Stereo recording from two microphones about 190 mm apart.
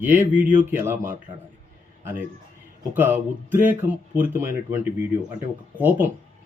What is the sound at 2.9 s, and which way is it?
Speech, 10° right (ahead or behind).